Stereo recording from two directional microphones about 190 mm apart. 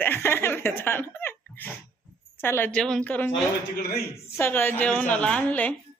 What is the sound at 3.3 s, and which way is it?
Speech, 55° left (ahead or behind).